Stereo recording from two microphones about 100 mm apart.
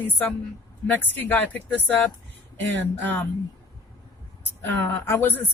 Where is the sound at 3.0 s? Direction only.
20° left (ahead or behind).